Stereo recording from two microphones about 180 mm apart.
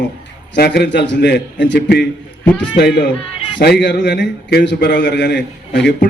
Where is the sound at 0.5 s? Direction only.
65° left (ahead or behind).